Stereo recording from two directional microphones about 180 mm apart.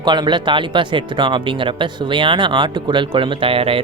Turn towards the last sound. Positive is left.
turn(degrees=-30)  # may be behind; listen again after turning